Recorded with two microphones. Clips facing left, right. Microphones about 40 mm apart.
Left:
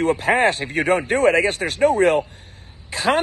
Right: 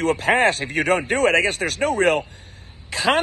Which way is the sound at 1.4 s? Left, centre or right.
Left.